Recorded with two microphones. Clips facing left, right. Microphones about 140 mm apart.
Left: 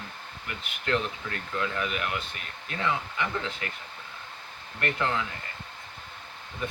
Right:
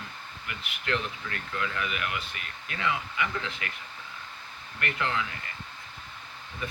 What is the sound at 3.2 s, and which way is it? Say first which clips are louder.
Speech: left 1 dB; 35° left (ahead or behind).